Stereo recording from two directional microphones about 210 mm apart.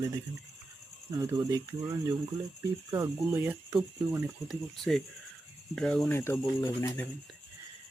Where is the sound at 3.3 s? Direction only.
15° right (ahead or behind).